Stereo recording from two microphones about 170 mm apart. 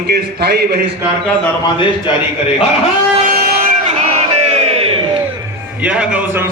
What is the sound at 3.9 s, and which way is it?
Crowd, 40° right (ahead or behind).